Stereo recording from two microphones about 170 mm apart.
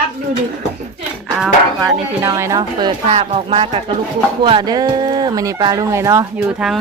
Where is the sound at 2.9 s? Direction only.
35° right (ahead or behind); by 6.3 s 20° right (ahead or behind).